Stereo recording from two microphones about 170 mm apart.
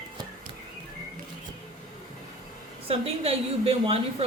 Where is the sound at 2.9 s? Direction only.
35° right (ahead or behind).